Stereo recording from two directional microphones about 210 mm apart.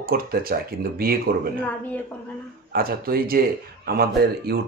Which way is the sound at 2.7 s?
45° right (ahead or behind).